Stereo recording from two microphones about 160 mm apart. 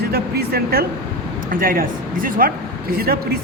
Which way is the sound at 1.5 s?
60° right (ahead or behind).